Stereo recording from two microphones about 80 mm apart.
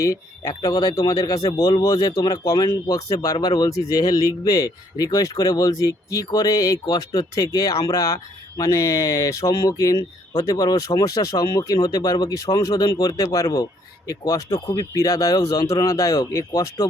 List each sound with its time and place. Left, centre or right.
0.0 s a man's voice: left